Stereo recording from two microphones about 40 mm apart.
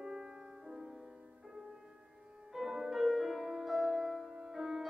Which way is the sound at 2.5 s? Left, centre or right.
Centre.